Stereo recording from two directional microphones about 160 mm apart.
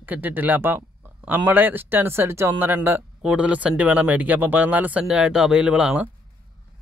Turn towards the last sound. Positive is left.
turn(degrees=-5)  # may be behind; listen again after turning